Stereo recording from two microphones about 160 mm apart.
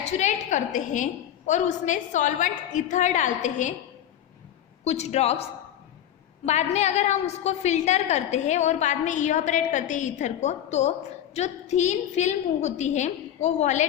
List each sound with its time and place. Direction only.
0.0 s a woman's voice: 45° left (ahead or behind)
4.8 s a woman's voice: 45° left (ahead or behind)